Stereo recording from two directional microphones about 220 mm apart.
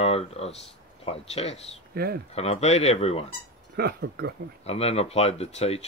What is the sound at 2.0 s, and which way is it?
Speech, 45° right (ahead or behind).